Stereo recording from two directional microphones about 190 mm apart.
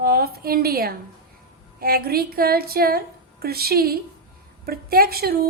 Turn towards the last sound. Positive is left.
turn(degrees=-55)  # may be behind; listen again after turning